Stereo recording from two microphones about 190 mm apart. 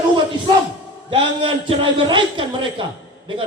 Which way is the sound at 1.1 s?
30° right (ahead or behind).